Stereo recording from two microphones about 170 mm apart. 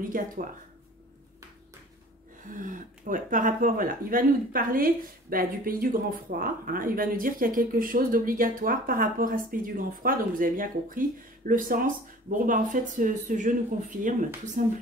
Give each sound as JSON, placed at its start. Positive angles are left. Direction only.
{"t": 2.5, "sound": "speech", "side_deg": -50}